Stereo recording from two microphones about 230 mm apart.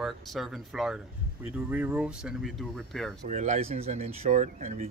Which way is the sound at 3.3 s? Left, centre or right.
Right.